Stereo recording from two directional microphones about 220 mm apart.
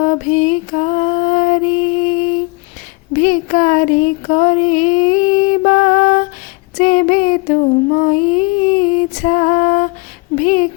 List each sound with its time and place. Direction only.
0.0 s music: 35° left (ahead or behind)
3.1 s female singing: 35° left (ahead or behind)
6.7 s child singing: 35° left (ahead or behind)
10.3 s a sound: 35° left (ahead or behind)